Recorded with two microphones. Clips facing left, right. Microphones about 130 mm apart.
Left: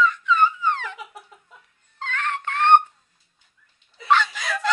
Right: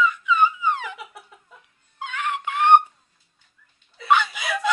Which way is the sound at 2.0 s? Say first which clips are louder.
Even; 10° right (ahead or behind).